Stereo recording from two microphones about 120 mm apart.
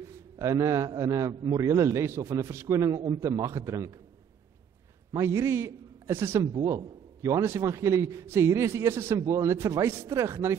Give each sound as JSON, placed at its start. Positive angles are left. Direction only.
{"t": 0.0, "sound": "a man's voice", "side_deg": -25}
{"t": 5.1, "sound": "a man's voice", "side_deg": -25}